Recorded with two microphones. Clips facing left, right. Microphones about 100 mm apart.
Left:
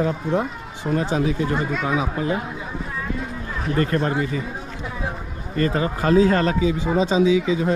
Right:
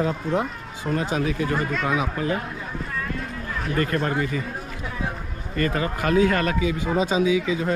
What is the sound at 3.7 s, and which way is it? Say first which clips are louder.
Speech: left 3 dB; 30° left (ahead or behind).